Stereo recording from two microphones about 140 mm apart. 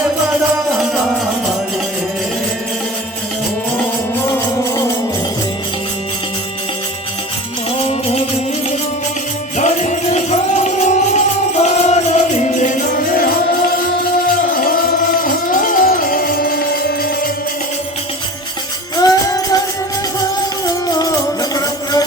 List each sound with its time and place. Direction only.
9.6 s music: 55° left (ahead or behind)
14.3 s music: 90° left
15.4 s music: 80° left
18.9 s music: 25° left (ahead or behind)
20.7 s music: 30° left (ahead or behind)